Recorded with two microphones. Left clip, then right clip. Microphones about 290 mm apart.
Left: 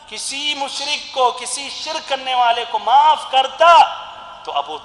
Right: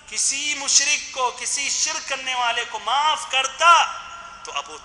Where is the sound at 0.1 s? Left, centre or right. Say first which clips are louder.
Left 2 dB; centre.